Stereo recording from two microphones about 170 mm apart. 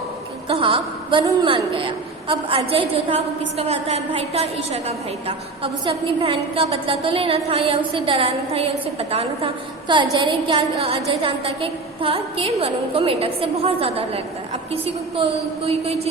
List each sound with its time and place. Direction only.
0.4 s a woman's voice: 30° right (ahead or behind)